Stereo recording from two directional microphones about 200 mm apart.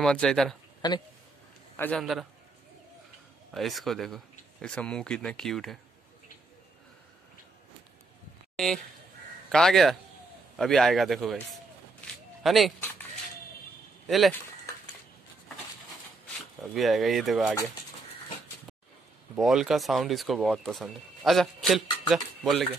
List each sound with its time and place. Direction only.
0.0 s speech: 5° left (ahead or behind)
0.8 s speech: 20° left (ahead or behind)
1.8 s speech: 5° left (ahead or behind)
3.5 s speech: centre (ahead or behind)
8.5 s speech: centre (ahead or behind)
12.4 s speech: centre (ahead or behind)
14.0 s speech: centre (ahead or behind)
16.7 s speech: centre (ahead or behind)
19.3 s speech: 5° right (ahead or behind)